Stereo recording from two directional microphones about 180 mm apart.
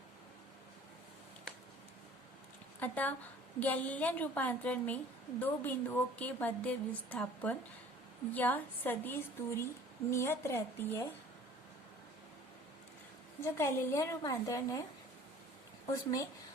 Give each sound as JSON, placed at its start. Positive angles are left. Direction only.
{"t": 2.8, "sound": "a woman's voice", "side_deg": 10}
{"t": 13.4, "sound": "a woman's voice", "side_deg": 15}